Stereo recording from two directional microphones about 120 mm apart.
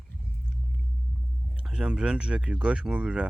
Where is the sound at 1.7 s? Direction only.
5° right (ahead or behind).